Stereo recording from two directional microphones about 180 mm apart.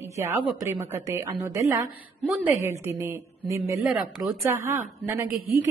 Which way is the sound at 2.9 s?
15° right (ahead or behind).